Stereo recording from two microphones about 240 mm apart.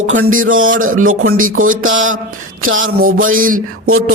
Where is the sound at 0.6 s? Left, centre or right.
Right.